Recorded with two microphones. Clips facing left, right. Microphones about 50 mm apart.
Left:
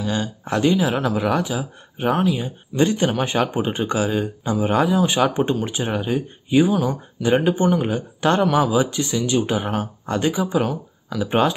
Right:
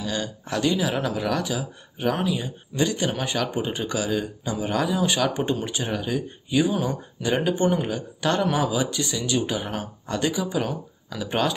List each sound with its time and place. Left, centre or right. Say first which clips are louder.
0.0 s speech: left 4 dB; left